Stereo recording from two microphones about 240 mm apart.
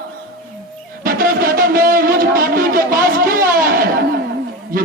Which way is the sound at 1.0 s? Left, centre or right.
Right.